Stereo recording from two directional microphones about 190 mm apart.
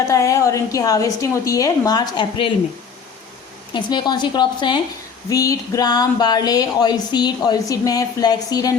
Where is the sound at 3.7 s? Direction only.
25° left (ahead or behind).